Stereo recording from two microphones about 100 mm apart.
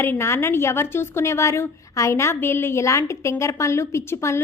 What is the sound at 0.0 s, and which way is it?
A woman's voice, 25° left (ahead or behind).